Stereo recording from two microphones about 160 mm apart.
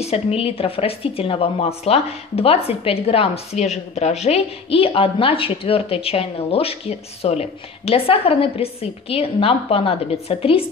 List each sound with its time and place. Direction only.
0.0 s a woman's voice: 40° left (ahead or behind)